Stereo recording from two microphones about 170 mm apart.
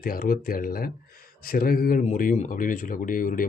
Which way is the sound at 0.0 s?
55° left (ahead or behind).